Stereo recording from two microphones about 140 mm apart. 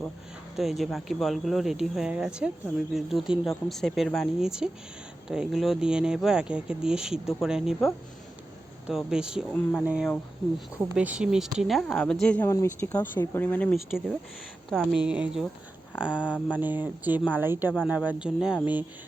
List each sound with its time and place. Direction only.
0.5 s speech: centre (ahead or behind)
12.5 s speech: 20° left (ahead or behind)
13.7 s speech: centre (ahead or behind)
15.0 s speech: 5° right (ahead or behind)
16.2 s speech: 10° left (ahead or behind)
16.6 s speech: 15° right (ahead or behind)